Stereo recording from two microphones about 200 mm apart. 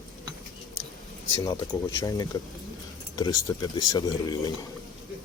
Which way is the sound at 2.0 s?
20° left (ahead or behind).